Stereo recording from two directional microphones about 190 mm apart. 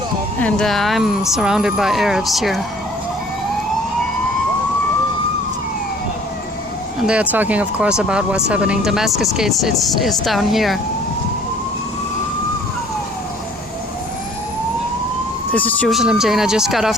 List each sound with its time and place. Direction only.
0.3 s speech: 5° left (ahead or behind)
7.1 s speech: 10° right (ahead or behind)
15.5 s speech: 10° left (ahead or behind)